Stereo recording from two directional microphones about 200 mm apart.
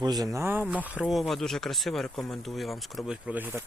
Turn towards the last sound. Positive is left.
turn(degrees=-10)  # may be behind; listen again after turning